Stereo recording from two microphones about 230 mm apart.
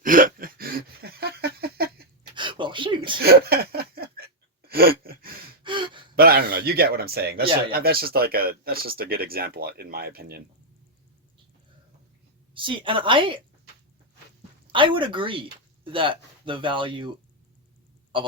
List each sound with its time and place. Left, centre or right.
0.0 s a sound: right
2.3 s a sound: right
3.2 s chuckle: right
4.7 s gasp: right
5.6 s gasp: right
6.1 s a sound: right
7.7 s speech: right
12.5 s a woman's voice: right
14.7 s speech: right